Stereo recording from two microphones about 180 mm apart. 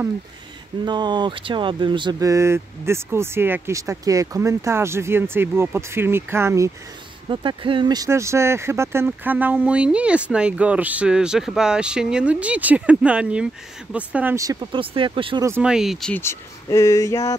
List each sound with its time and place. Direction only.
0.8 s speech: 25° right (ahead or behind)
7.2 s speech: 30° right (ahead or behind)
15.4 s speech: 10° right (ahead or behind); by 17.4 s 15° left (ahead or behind)